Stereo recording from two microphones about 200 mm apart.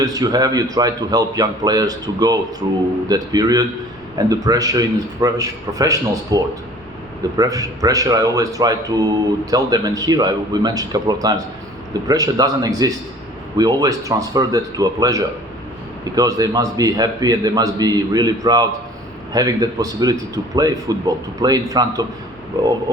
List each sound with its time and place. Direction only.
0.0 s a man's voice: 20° right (ahead or behind)